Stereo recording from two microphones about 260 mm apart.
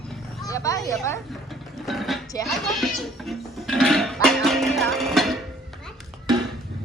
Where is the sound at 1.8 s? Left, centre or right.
Centre.